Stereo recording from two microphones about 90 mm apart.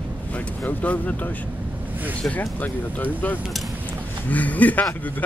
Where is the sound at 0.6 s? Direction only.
15° left (ahead or behind).